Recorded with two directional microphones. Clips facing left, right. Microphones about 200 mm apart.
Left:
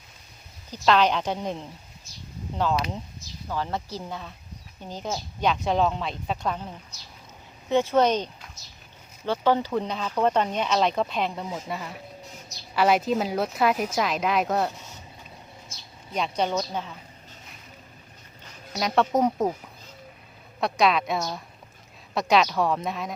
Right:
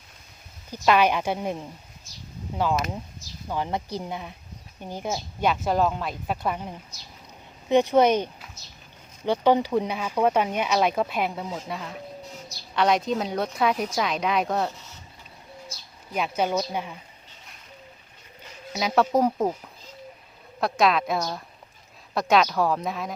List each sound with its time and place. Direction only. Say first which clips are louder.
0.7 s speech: right 1 dB; 10° right (ahead or behind)
3.5 s a woman's voice: right 2 dB; 15° right (ahead or behind); by 14.7 s centre (ahead or behind)
16.1 s speech: right 1 dB; 5° right (ahead or behind)
18.7 s a woman's voice: right 1 dB; 5° right (ahead or behind)
20.6 s a woman's voice: right 1 dB; centre (ahead or behind)